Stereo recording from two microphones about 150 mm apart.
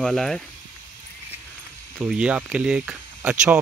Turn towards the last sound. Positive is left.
turn(degrees=-10)  # may be behind; listen again after turning